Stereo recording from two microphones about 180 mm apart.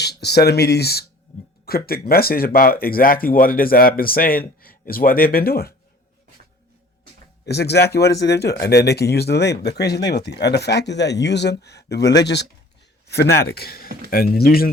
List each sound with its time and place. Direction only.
0.0 s speech: 65° left (ahead or behind)
7.4 s speech: 65° left (ahead or behind)